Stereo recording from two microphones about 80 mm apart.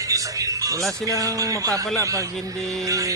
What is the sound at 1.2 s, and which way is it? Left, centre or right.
Speech, right.